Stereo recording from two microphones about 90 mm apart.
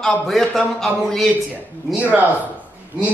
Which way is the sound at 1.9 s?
15° right (ahead or behind).